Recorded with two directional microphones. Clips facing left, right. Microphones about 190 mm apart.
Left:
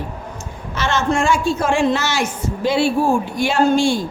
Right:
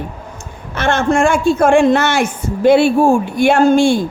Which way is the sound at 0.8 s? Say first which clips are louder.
Right 5 dB; 55° right (ahead or behind).